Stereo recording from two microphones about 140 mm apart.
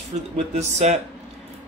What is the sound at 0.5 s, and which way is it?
Speech, 55° right (ahead or behind).